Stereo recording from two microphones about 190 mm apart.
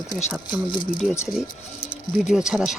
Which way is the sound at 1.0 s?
Centre (ahead or behind).